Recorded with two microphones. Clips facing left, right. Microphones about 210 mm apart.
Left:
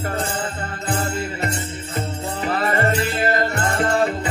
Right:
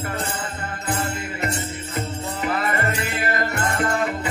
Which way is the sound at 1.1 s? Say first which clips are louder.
Left 2 dB; 30° left (ahead or behind).